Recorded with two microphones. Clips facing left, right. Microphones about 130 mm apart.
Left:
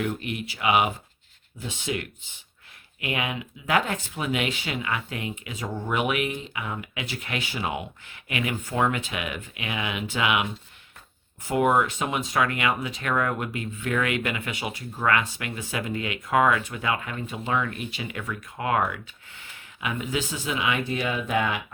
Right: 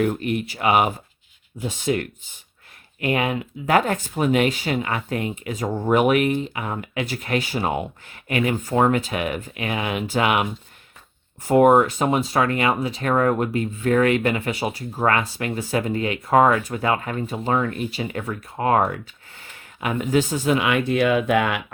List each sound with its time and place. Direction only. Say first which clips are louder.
0.0 s speech: right 7 dB; 45° right (ahead or behind)
11.4 s speech: right 7 dB; 45° right (ahead or behind)
19.4 s speech: right 4 dB; 50° right (ahead or behind); by 21.6 s 65° right (ahead or behind)